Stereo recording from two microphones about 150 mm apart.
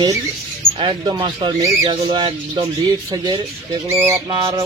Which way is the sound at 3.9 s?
15° right (ahead or behind).